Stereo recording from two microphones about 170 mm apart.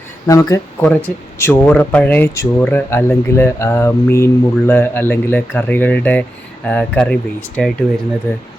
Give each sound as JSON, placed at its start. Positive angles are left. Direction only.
{"t": 0.3, "sound": "speech", "side_deg": 20}